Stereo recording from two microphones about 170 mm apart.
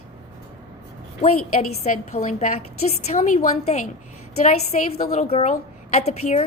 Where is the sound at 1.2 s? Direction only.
40° left (ahead or behind).